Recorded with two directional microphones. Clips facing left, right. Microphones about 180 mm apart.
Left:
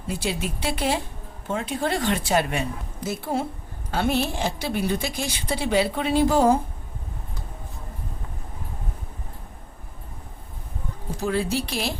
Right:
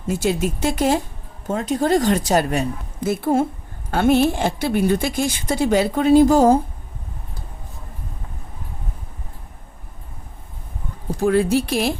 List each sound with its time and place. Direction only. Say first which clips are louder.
0.1 s a woman's voice: right 7 dB; 45° right (ahead or behind)
11.2 s a woman's voice: right 8 dB; 55° right (ahead or behind)